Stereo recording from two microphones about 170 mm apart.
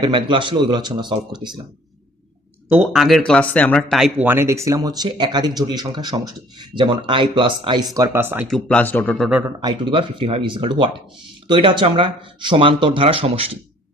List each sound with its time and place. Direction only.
0.0 s speech: 30° right (ahead or behind)
2.7 s speech: centre (ahead or behind)
8.4 s a man's voice: centre (ahead or behind)
9.6 s speech: 30° right (ahead or behind)